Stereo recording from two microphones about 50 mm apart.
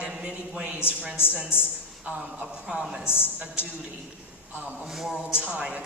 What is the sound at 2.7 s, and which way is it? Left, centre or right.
Speech, centre.